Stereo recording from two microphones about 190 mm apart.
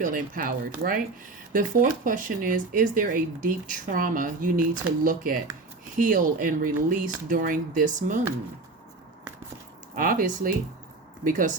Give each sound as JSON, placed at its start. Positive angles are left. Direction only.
{"t": 0.0, "sound": "speech", "side_deg": -45}
{"t": 9.9, "sound": "speech", "side_deg": -50}